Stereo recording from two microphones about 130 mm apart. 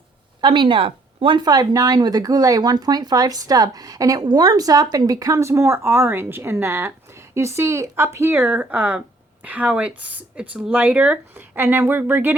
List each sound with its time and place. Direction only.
0.4 s speech: 35° right (ahead or behind); by 12.3 s 15° right (ahead or behind)